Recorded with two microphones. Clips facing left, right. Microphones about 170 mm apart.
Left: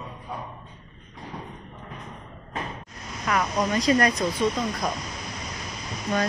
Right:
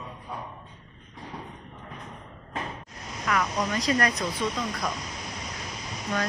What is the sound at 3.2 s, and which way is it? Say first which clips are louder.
Speech: left 2 dB; 25° left (ahead or behind).